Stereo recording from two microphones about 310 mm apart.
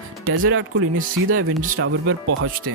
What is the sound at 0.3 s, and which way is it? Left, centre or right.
Speech, right.